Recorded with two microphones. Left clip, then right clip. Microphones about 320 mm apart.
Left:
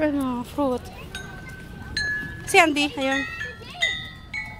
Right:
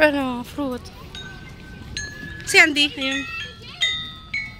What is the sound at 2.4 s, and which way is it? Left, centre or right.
Speech, centre.